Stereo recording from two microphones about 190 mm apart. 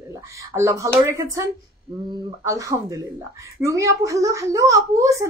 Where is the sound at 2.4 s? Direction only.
15° right (ahead or behind).